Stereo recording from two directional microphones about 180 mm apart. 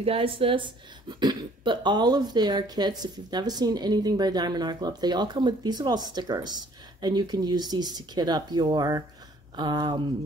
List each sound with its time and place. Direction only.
0.0 s a woman's voice: 30° right (ahead or behind)